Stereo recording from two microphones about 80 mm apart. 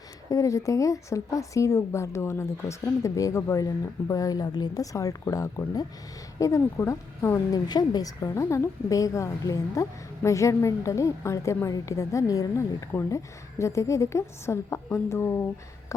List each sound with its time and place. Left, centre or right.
0.3 s a woman's voice: left
7.5 s a woman's voice: left
12.9 s a woman's voice: left